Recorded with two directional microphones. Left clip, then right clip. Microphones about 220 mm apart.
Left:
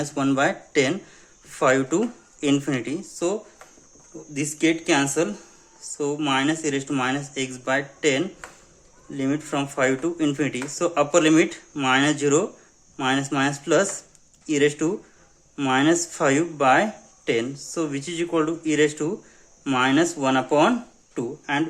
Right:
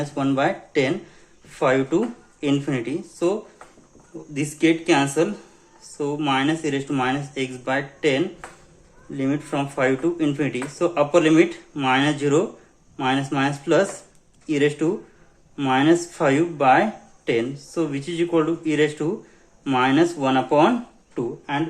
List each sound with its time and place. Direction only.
0.0 s speech: 25° left (ahead or behind)
21.2 s speech: 35° left (ahead or behind)